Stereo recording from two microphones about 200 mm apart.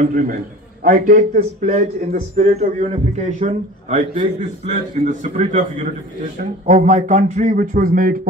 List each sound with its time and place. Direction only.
0.0 s a man's voice: 40° right (ahead or behind)